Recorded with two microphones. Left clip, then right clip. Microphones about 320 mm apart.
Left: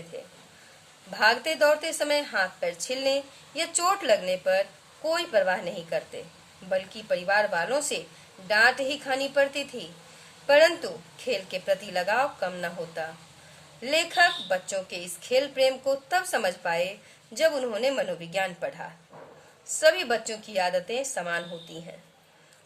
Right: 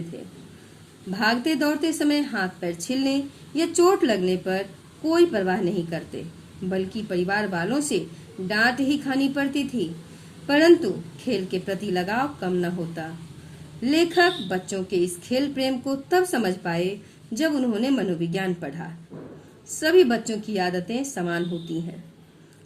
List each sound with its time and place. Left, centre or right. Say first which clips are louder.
1.1 s a woman's voice: even; left